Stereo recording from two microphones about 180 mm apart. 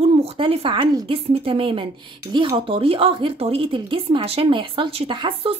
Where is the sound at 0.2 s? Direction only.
30° right (ahead or behind).